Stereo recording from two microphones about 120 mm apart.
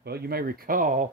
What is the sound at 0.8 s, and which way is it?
Speech, 90° right.